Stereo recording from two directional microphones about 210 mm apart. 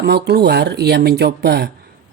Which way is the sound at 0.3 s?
50° right (ahead or behind).